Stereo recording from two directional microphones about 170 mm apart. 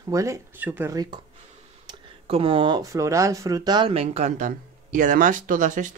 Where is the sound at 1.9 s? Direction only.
30° right (ahead or behind).